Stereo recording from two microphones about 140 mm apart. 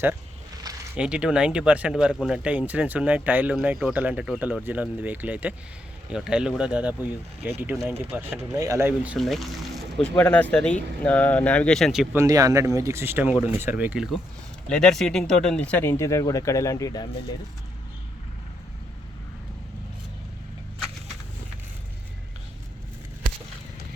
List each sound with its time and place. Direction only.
0.9 s speech: 5° right (ahead or behind)
9.1 s speech: centre (ahead or behind)
12.1 s speech: 25° right (ahead or behind)
14.7 s speech: 5° left (ahead or behind); by 17.1 s 25° left (ahead or behind)